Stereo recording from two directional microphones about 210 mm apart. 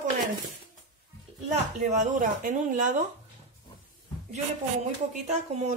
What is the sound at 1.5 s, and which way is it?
A woman's voice, 35° right (ahead or behind).